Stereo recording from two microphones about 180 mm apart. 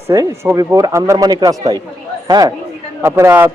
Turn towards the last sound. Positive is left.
turn(degrees=-15)  # may be behind; listen again after turning